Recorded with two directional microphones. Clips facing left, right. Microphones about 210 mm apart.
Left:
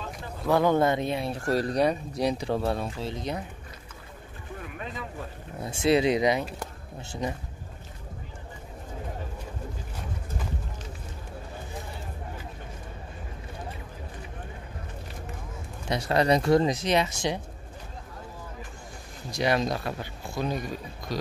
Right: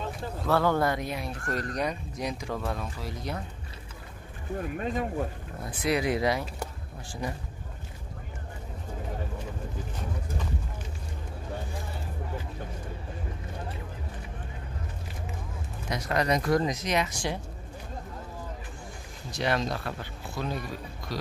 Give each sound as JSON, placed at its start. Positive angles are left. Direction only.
{"t": 0.5, "sound": "speech", "side_deg": 15}
{"t": 4.6, "sound": "speech", "side_deg": -45}
{"t": 5.6, "sound": "speech", "side_deg": 25}
{"t": 15.9, "sound": "speech", "side_deg": 30}
{"t": 19.3, "sound": "speech", "side_deg": 15}